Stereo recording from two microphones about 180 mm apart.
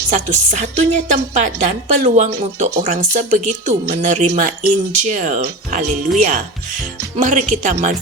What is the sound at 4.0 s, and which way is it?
Music, 40° right (ahead or behind).